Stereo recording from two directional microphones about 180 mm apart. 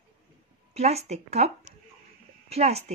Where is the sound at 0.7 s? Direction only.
35° right (ahead or behind).